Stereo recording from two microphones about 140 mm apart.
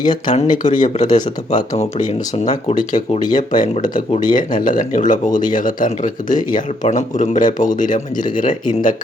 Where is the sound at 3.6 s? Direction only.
65° left (ahead or behind).